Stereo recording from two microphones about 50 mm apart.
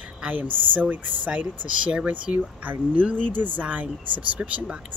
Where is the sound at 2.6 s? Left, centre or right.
Right.